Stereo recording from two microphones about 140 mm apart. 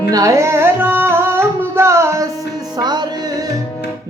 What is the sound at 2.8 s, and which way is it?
Music, 30° right (ahead or behind).